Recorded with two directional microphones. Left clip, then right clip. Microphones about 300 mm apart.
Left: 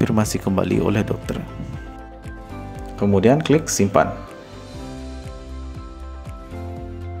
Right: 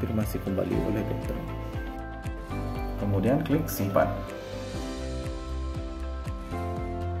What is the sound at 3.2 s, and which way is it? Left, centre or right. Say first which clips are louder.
Speech: left 10 dB; left.